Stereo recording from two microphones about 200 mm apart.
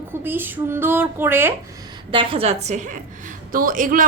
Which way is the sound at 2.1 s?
30° right (ahead or behind).